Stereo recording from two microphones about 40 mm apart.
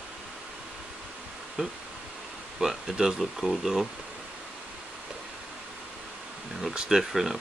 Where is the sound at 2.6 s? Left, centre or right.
Centre.